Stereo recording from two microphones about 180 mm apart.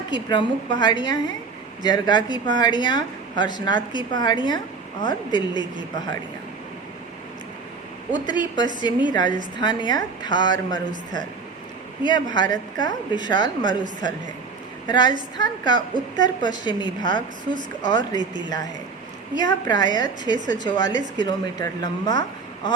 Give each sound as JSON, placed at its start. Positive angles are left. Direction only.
{"t": 0.1, "sound": "speech", "side_deg": 25}
{"t": 8.1, "sound": "speech", "side_deg": 25}
{"t": 14.8, "sound": "a woman's voice", "side_deg": 25}
{"t": 19.4, "sound": "speech", "side_deg": 25}
{"t": 20.3, "sound": "speech", "side_deg": -45}
{"t": 20.7, "sound": "speech", "side_deg": 25}